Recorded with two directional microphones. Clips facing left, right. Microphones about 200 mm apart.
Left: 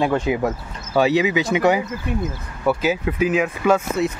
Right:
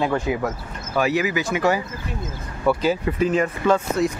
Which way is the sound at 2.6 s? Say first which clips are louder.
Even; 5° left (ahead or behind).